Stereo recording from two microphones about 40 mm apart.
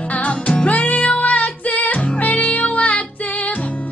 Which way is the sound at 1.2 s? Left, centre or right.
Left.